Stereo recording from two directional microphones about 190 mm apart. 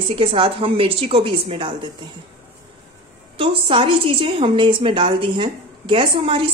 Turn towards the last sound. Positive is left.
turn(degrees=-25)  # may be behind; listen again after turning